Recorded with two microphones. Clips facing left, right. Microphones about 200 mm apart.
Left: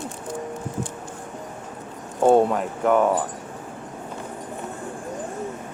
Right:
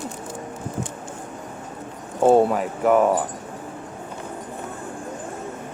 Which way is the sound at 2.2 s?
5° right (ahead or behind).